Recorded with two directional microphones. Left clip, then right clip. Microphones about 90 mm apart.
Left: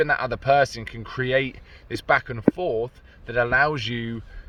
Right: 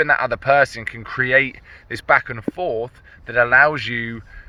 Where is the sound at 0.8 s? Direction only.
30° left (ahead or behind).